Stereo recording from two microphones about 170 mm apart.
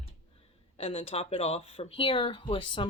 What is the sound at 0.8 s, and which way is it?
Speech, 35° left (ahead or behind).